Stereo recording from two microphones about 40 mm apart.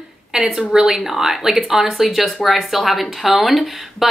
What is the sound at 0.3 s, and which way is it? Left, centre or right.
Speech, centre.